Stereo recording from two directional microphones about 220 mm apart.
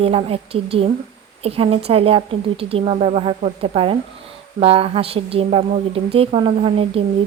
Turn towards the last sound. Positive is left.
turn(degrees=-25)  # may be behind; listen again after turning